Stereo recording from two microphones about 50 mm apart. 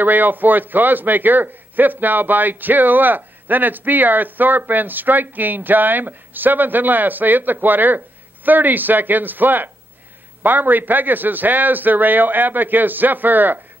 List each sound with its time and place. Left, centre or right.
0.0 s a man's voice: right